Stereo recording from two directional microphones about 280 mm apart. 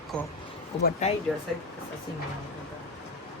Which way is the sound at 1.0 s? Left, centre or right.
Left.